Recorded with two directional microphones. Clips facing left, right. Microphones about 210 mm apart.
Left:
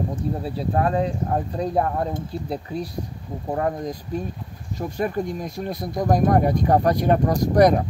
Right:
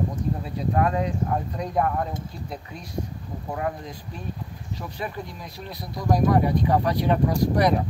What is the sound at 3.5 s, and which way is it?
Speech, 40° left (ahead or behind).